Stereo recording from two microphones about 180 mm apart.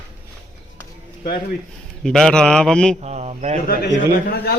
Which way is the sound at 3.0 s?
35° right (ahead or behind).